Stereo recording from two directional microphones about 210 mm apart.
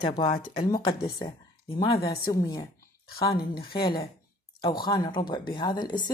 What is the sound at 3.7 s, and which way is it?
Speech, 45° left (ahead or behind).